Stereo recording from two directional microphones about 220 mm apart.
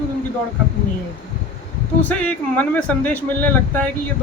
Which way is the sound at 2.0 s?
5° left (ahead or behind).